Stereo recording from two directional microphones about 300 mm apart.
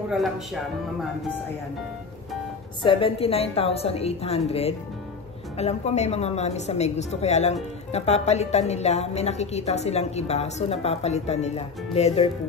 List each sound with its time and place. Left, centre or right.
2.8 s a woman's voice: centre